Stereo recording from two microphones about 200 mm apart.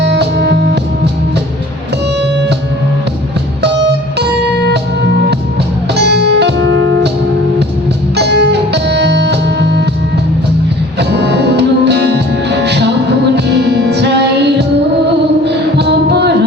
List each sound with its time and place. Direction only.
0.0 s music: 60° right (ahead or behind)
5.9 s music: 55° right (ahead or behind)
8.1 s music: 55° right (ahead or behind)
11.1 s music: 60° right (ahead or behind)